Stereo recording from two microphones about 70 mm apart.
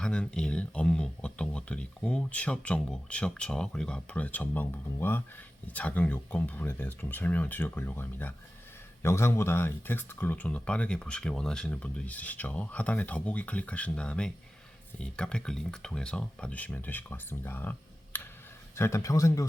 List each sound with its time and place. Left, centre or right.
0.0 s speech: centre; by 5.2 s left
5.6 s speech: left
9.0 s speech: left
18.8 s speech: left